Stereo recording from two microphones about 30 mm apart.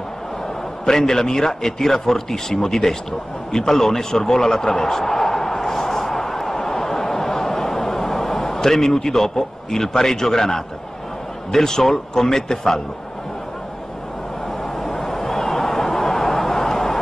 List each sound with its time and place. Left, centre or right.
0.8 s speech: centre
14.8 s a sound: centre
16.3 s vehicle: centre